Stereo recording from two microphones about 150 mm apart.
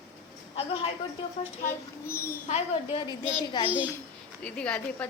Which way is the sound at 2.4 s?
45° left (ahead or behind).